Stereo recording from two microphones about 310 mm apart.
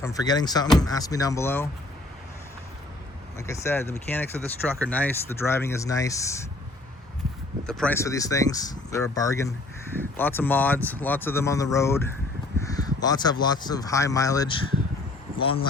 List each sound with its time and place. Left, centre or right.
0.0 s speech: centre
3.3 s speech: centre
7.7 s speech: centre